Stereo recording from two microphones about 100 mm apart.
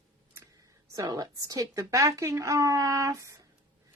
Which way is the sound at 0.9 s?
40° right (ahead or behind).